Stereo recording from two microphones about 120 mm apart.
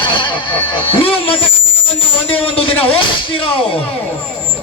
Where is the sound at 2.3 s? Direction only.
50° left (ahead or behind).